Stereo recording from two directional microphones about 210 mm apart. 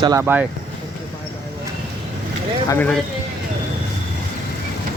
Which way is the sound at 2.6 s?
10° left (ahead or behind).